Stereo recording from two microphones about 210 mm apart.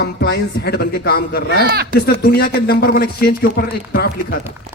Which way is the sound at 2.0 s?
45° left (ahead or behind).